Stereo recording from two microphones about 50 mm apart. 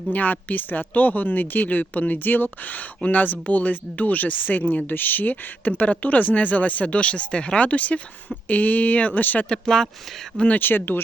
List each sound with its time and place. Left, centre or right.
0.1 s speech: left
9.5 s speech: centre
10.3 s speech: left
10.6 s speech: left